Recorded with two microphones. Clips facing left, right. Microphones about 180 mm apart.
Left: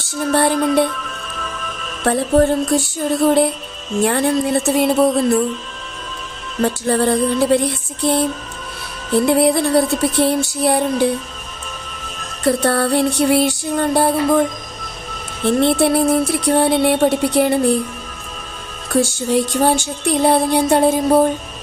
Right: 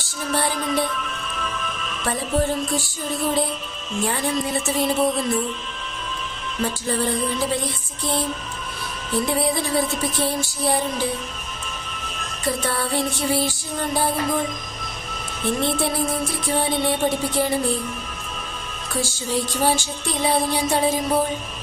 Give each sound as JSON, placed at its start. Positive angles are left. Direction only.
{"t": 0.2, "sound": "music", "side_deg": 60}
{"t": 2.0, "sound": "music", "side_deg": 60}
{"t": 6.6, "sound": "music", "side_deg": 60}
{"t": 12.5, "sound": "music", "side_deg": 65}
{"t": 15.4, "sound": "music", "side_deg": 65}
{"t": 18.9, "sound": "music", "side_deg": 60}